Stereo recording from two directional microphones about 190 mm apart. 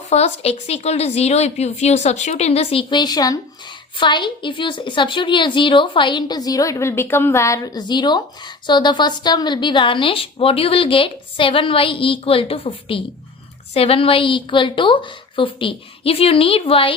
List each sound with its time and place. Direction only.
0.1 s a woman's voice: 35° left (ahead or behind)